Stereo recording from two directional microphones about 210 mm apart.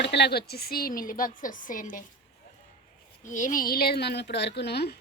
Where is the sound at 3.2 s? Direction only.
35° left (ahead or behind).